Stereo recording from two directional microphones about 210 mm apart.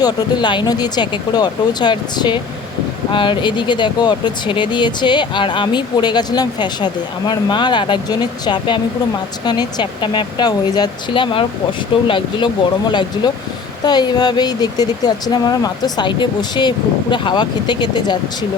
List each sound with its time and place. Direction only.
0.0 s speech: 20° left (ahead or behind)